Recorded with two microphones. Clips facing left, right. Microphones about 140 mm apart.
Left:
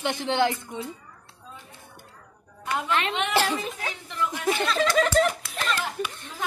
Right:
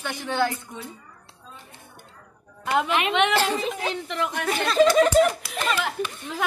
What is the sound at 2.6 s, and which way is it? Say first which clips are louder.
Speech: right 6 dB; 70° right (ahead or behind).